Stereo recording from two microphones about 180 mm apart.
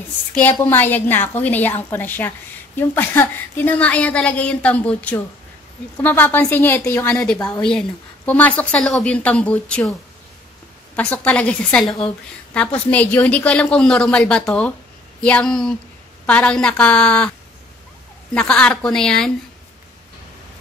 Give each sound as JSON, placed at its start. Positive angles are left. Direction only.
{"t": 0.3, "sound": "a woman's voice", "side_deg": 10}
{"t": 11.0, "sound": "a woman's voice", "side_deg": 10}
{"t": 18.3, "sound": "a woman's voice", "side_deg": 5}